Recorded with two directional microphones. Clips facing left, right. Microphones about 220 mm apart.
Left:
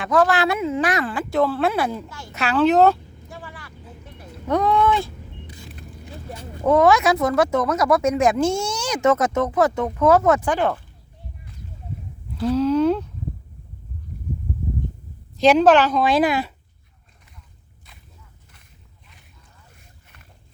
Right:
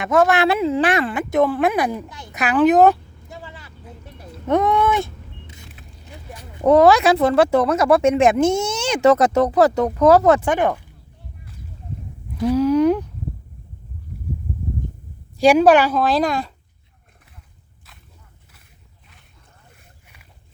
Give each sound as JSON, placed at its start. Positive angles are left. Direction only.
{"t": 0.0, "sound": "speech", "side_deg": -25}
{"t": 4.4, "sound": "a sound", "side_deg": -20}
{"t": 6.7, "sound": "speech", "side_deg": -35}
{"t": 10.4, "sound": "speech", "side_deg": -20}
{"t": 12.4, "sound": "speech", "side_deg": -15}
{"t": 15.4, "sound": "speech", "side_deg": -10}
{"t": 16.0, "sound": "speech", "side_deg": 0}